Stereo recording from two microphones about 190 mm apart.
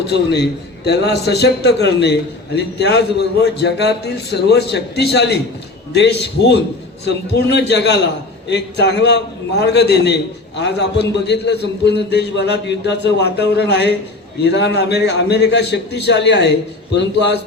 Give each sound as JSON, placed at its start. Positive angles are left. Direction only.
{"t": 0.1, "sound": "a man's voice", "side_deg": 60}